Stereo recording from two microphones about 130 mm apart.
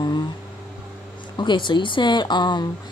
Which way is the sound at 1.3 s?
35° left (ahead or behind).